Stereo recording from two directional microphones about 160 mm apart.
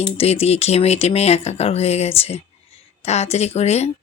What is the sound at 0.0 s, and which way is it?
Speech, 40° left (ahead or behind).